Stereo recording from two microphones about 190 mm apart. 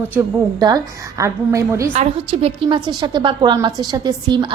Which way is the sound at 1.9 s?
35° right (ahead or behind).